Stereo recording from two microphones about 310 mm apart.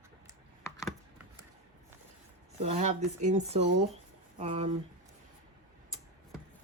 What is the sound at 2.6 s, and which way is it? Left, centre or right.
Speech, right.